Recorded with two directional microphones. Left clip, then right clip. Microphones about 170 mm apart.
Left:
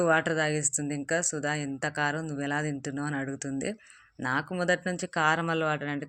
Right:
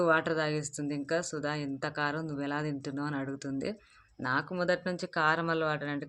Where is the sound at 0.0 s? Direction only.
15° left (ahead or behind).